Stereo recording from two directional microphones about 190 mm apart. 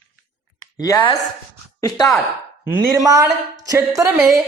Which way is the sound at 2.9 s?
15° right (ahead or behind).